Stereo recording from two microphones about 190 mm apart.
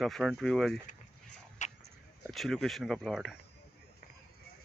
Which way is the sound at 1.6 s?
40° left (ahead or behind).